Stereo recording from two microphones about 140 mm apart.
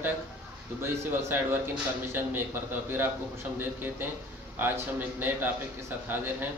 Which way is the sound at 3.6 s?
15° right (ahead or behind).